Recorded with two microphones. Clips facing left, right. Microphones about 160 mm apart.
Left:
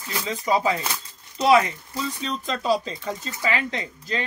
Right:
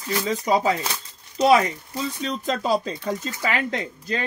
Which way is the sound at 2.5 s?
45° right (ahead or behind).